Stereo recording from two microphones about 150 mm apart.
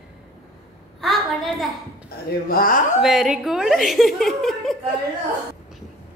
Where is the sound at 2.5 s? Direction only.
70° left (ahead or behind).